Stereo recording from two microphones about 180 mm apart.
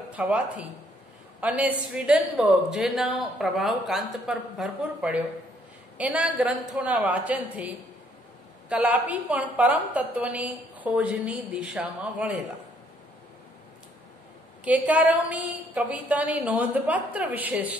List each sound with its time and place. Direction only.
0.1 s a woman's voice: 5° right (ahead or behind)
14.6 s a woman's voice: 10° right (ahead or behind)